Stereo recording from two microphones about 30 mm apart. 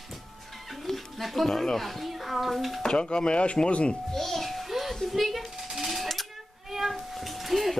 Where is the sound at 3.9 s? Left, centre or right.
Centre.